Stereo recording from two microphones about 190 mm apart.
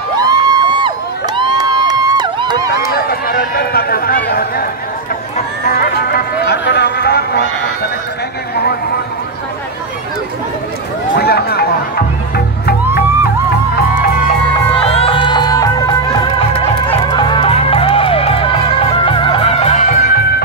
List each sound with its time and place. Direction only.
0.2 s crowd: 20° right (ahead or behind)
2.9 s run: 50° left (ahead or behind)
5.8 s a sound: 55° left (ahead or behind)
11.1 s a sound: 55° left (ahead or behind)
12.4 s music: 55° left (ahead or behind)
14.5 s music: 30° left (ahead or behind); by 20.4 s 50° left (ahead or behind)